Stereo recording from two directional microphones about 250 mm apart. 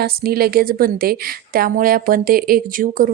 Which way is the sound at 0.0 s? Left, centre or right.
Right.